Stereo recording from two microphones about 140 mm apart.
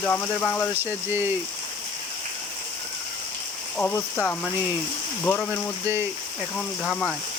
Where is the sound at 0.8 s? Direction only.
15° right (ahead or behind).